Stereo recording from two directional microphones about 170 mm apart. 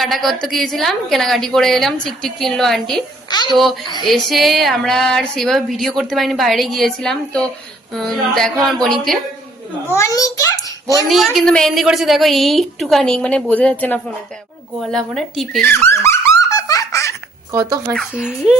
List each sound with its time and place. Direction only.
0.0 s speech: centre (ahead or behind)
3.2 s a child's voice: 25° left (ahead or behind)
4.1 s speech: centre (ahead or behind)
9.9 s a child's voice: 20° left (ahead or behind)
11.1 s speech: centre (ahead or behind)
15.6 s a sound: 15° left (ahead or behind)
17.5 s speech: 20° right (ahead or behind)